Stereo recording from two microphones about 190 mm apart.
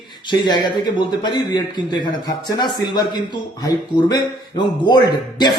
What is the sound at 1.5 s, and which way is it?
A man's voice, 25° left (ahead or behind).